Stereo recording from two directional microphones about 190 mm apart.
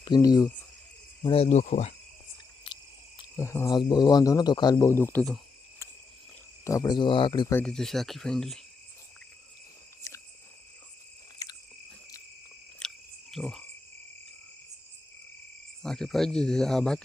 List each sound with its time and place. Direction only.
0.0 s speech: 20° left (ahead or behind); by 1.9 s 40° left (ahead or behind)
3.3 s speech: 15° left (ahead or behind)
6.7 s speech: 20° left (ahead or behind)
7.5 s speech: 5° left (ahead or behind)
10.1 s cricket: 15° left (ahead or behind)
11.4 s cricket: 20° left (ahead or behind)
12.8 s cricket: 5° left (ahead or behind)
13.3 s frog: centre (ahead or behind)
15.8 s speech: 5° left (ahead or behind)